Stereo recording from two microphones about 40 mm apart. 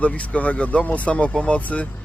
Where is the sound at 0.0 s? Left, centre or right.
Left.